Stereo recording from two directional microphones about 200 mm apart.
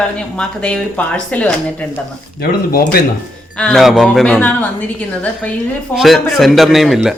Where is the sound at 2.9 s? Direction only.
50° left (ahead or behind).